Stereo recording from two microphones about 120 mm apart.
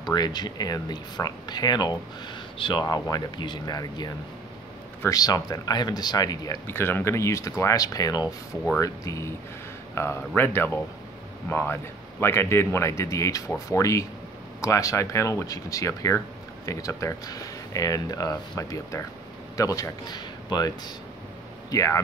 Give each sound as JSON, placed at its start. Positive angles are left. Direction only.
{"t": 0.0, "sound": "speech", "side_deg": 35}
{"t": 5.1, "sound": "speech", "side_deg": 30}
{"t": 6.7, "sound": "speech", "side_deg": 20}